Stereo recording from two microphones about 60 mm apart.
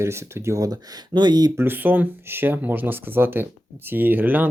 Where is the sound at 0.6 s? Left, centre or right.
Right.